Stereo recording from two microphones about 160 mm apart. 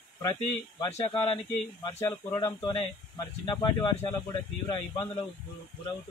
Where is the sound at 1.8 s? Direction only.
25° left (ahead or behind).